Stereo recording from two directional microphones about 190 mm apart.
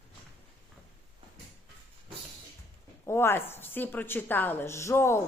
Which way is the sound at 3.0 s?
15° left (ahead or behind).